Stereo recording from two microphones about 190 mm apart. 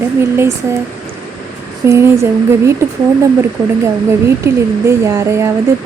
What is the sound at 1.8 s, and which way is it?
Speech, 15° right (ahead or behind).